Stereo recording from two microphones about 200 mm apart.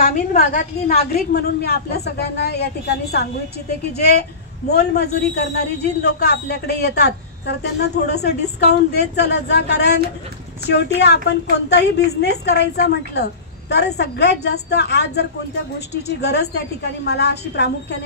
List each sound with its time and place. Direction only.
0.0 s a woman's voice: 45° left (ahead or behind)